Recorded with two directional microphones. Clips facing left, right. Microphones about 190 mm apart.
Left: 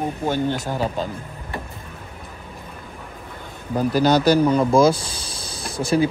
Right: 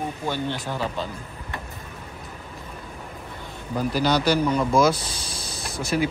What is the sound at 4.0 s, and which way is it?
Speech, 45° left (ahead or behind).